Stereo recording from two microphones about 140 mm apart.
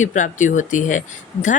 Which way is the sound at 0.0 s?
60° left (ahead or behind).